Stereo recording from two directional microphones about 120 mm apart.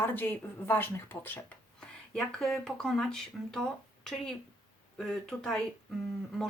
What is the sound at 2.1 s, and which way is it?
Speech, 5° left (ahead or behind).